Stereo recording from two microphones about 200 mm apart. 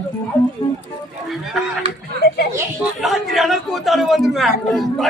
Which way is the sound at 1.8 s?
30° right (ahead or behind).